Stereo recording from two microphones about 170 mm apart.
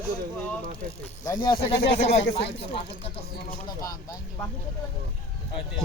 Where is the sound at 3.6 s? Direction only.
20° left (ahead or behind).